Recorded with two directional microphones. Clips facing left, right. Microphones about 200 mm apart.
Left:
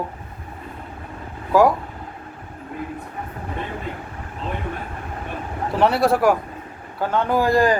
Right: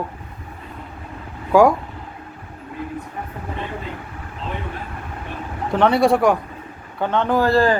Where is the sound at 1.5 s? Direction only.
Centre (ahead or behind).